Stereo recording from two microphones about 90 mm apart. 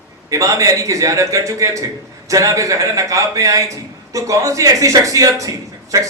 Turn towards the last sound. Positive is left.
turn(degrees=-35)  # may be behind; listen again after turning